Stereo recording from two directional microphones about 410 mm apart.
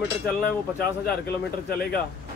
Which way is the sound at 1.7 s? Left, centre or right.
Left.